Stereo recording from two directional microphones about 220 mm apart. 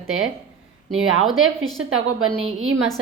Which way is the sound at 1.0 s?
70° right (ahead or behind).